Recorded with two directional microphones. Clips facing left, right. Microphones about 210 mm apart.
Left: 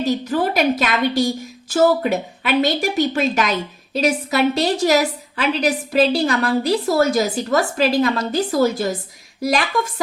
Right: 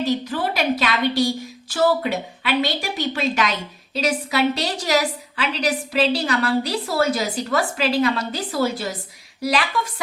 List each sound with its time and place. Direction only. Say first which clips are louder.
0.0 s a woman's voice: left 3 dB; 45° left (ahead or behind)